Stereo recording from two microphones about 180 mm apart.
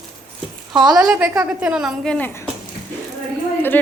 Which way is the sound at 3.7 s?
10° left (ahead or behind).